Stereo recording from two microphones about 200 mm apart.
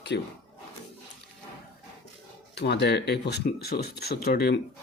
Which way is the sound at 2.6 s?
55° left (ahead or behind).